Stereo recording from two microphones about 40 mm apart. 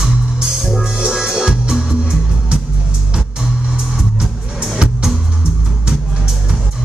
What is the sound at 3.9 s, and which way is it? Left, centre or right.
Music, centre.